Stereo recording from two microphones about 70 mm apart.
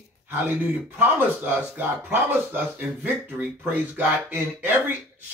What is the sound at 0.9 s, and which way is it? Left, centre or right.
Speech, right.